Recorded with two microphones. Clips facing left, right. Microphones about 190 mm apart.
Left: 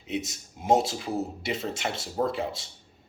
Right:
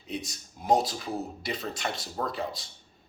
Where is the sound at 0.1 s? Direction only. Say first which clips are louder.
Left 4 dB; 20° left (ahead or behind).